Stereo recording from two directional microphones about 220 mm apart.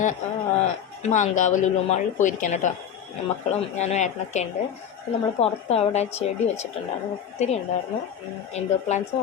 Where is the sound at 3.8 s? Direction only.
30° left (ahead or behind).